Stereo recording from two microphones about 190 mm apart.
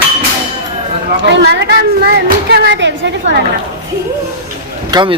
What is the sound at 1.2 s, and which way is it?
A woman's voice, 60° right (ahead or behind).